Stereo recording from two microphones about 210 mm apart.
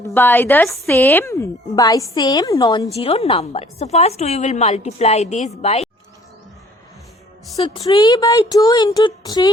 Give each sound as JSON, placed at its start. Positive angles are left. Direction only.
{"t": 0.1, "sound": "a woman's voice", "side_deg": 10}
{"t": 7.6, "sound": "speech", "side_deg": 25}